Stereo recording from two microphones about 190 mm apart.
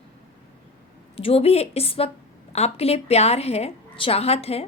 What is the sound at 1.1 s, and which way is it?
A woman's voice, 30° left (ahead or behind).